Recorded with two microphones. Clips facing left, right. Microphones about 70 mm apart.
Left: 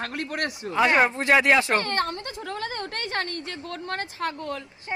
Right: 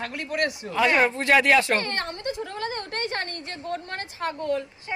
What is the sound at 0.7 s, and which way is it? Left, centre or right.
A man's voice, left.